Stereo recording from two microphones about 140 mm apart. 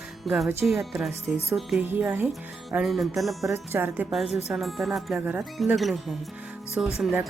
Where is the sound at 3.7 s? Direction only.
15° right (ahead or behind).